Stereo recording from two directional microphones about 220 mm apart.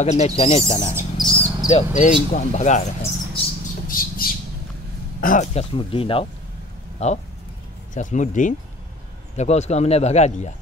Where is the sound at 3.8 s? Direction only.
40° left (ahead or behind).